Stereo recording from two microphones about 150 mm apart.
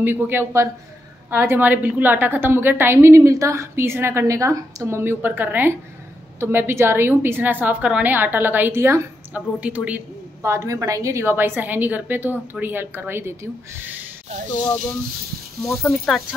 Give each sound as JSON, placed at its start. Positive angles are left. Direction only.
{"t": 0.0, "sound": "a woman's voice", "side_deg": -15}
{"t": 15.6, "sound": "speech", "side_deg": 0}